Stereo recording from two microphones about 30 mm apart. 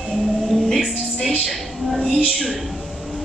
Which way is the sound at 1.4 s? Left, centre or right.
Centre.